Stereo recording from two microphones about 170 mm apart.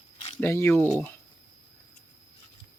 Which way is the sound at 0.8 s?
15° right (ahead or behind).